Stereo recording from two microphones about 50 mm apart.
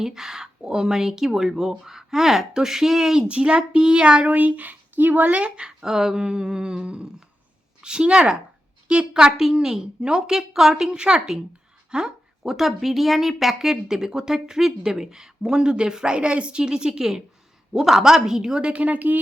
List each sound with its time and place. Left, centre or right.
0.0 s a woman's voice: centre; by 19.2 s right